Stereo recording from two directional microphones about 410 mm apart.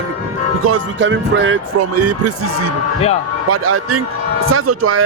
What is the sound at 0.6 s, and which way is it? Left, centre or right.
A man's voice, right.